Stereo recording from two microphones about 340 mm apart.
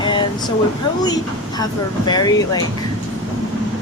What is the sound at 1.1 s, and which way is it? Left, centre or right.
Speech, centre.